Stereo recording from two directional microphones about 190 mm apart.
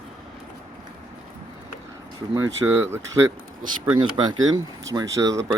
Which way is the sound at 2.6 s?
10° right (ahead or behind).